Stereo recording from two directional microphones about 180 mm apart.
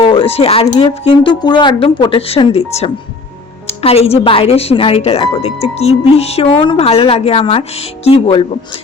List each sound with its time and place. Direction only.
0.0 s speech: 30° left (ahead or behind)